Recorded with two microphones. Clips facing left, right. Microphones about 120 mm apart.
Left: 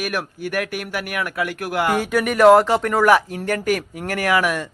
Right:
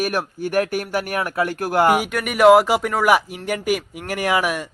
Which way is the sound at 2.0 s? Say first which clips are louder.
Left 4 dB; centre (ahead or behind).